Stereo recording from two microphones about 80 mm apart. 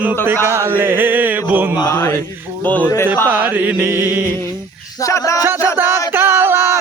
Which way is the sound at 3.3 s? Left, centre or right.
Right.